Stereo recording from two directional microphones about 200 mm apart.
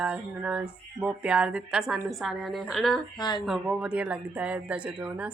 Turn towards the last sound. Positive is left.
turn(degrees=-5)  # may be behind; listen again after turning